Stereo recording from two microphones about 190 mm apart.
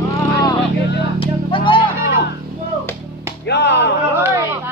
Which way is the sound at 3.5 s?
65° left (ahead or behind).